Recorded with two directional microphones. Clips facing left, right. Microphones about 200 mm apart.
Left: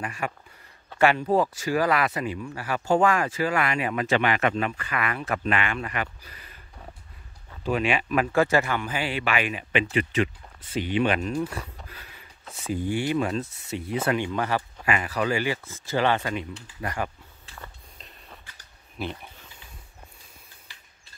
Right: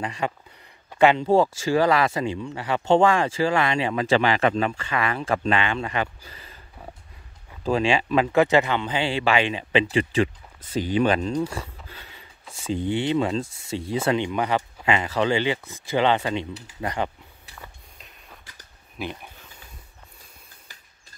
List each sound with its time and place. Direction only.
0.0 s speech: 25° right (ahead or behind)
7.7 s speech: 30° right (ahead or behind)
11.4 s a sound: 25° right (ahead or behind)
12.7 s speech: 25° right (ahead or behind)